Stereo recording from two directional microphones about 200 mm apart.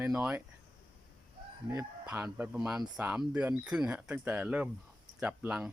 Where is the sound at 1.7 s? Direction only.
10° right (ahead or behind).